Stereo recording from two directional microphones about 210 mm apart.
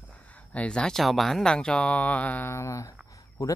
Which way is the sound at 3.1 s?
15° left (ahead or behind).